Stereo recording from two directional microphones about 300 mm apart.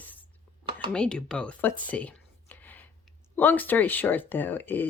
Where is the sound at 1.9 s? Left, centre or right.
Centre.